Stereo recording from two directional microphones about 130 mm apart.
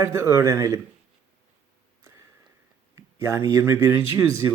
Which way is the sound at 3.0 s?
25° right (ahead or behind).